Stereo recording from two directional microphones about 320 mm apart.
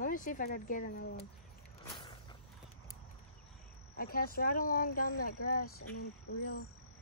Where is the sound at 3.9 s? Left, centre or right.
Left.